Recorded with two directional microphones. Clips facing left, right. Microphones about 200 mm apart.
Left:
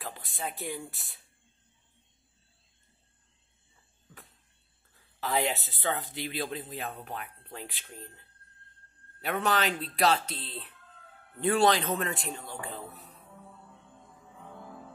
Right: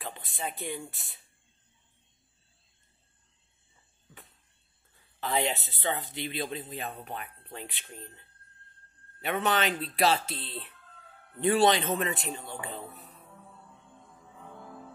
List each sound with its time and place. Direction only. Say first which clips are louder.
0.0 s speech: right 1 dB; centre (ahead or behind)
5.2 s speech: even; centre (ahead or behind)
9.2 s speech: right 1 dB; centre (ahead or behind)
11.6 s speech: even; 25° right (ahead or behind)
12.0 s speech: right 2 dB; centre (ahead or behind)
13.6 s music: even; centre (ahead or behind)